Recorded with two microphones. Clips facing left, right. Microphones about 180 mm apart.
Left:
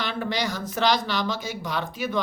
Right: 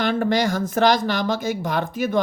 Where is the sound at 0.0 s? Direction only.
45° right (ahead or behind).